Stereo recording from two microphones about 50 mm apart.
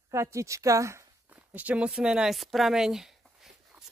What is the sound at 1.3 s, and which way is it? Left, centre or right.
Walk, right.